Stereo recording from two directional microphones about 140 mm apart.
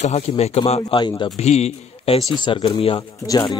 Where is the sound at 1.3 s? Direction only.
50° left (ahead or behind).